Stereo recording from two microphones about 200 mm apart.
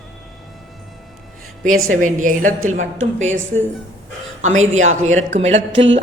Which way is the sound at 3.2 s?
70° right (ahead or behind).